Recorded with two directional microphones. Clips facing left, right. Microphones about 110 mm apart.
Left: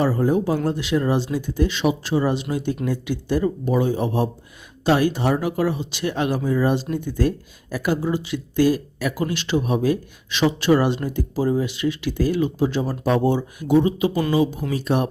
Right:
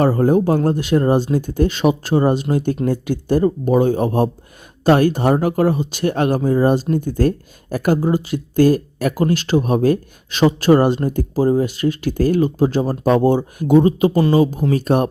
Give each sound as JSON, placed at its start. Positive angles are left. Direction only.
{"t": 0.0, "sound": "speech", "side_deg": -50}